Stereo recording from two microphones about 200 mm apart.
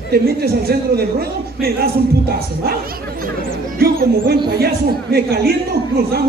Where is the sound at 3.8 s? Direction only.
45° right (ahead or behind).